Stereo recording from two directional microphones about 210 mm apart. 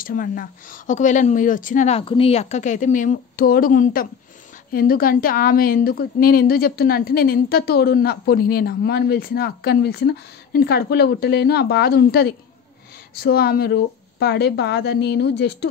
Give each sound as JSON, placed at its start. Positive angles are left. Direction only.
{"t": 0.0, "sound": "a woman's voice", "side_deg": 40}